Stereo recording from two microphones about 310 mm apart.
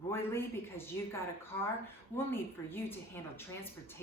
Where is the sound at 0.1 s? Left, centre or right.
Centre.